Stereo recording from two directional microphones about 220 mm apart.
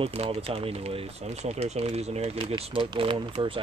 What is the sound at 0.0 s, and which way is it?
Speech, 30° right (ahead or behind).